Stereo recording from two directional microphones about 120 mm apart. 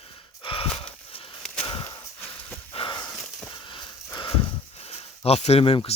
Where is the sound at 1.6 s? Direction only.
35° left (ahead or behind).